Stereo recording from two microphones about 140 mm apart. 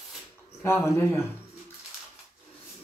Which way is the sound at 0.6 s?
15° left (ahead or behind).